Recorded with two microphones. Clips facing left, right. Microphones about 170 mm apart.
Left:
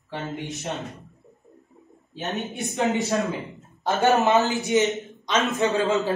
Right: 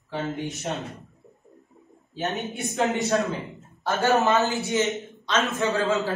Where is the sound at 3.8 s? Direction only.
20° left (ahead or behind).